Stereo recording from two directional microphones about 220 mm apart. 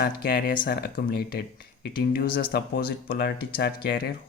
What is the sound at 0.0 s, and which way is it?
Speech, 45° left (ahead or behind).